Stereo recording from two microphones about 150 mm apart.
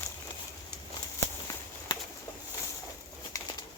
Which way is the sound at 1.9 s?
30° left (ahead or behind).